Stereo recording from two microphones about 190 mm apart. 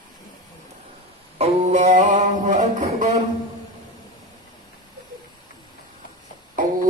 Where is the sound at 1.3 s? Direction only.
35° right (ahead or behind).